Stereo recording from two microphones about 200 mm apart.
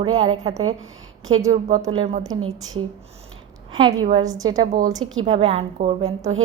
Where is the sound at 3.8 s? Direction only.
20° right (ahead or behind).